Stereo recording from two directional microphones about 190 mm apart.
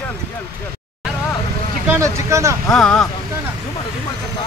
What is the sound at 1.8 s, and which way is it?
Speech, 15° right (ahead or behind).